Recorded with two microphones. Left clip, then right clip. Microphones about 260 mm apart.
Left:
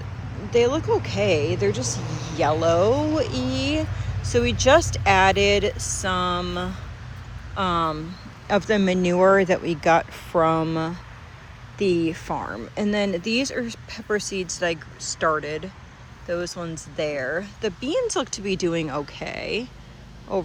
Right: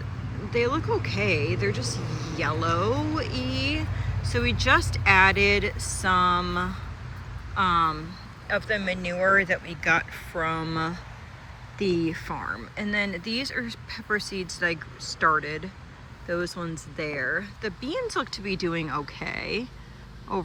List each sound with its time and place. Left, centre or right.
0.5 s speech: centre
2.0 s speech: left
2.3 s speech: centre
8.6 s speech: left; by 20.4 s centre